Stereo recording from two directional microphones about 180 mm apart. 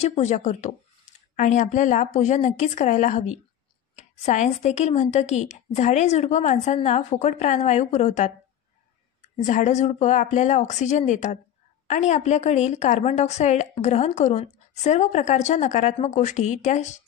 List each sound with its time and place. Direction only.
0.0 s a woman's voice: 40° left (ahead or behind)
9.4 s a woman's voice: 40° left (ahead or behind)